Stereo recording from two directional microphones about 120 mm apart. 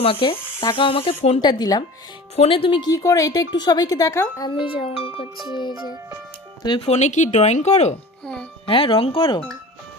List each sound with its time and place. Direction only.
0.0 s speech: 50° left (ahead or behind)
1.4 s speech: 35° left (ahead or behind)
2.3 s speech: 55° left (ahead or behind)
2.9 s speech: 30° left (ahead or behind)
4.6 s speech: 50° left (ahead or behind)
6.6 s speech: 40° left (ahead or behind)
6.8 s speech: 70° left (ahead or behind)
8.2 s music: 5° left (ahead or behind)
8.6 s speech: 50° left (ahead or behind)